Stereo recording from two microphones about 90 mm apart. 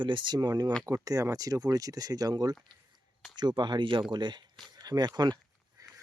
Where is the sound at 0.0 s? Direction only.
65° right (ahead or behind).